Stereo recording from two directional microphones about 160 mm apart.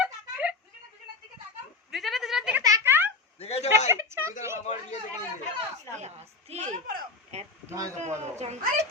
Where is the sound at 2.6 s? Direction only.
20° right (ahead or behind).